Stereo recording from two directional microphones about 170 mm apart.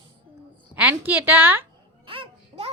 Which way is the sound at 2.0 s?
30° right (ahead or behind).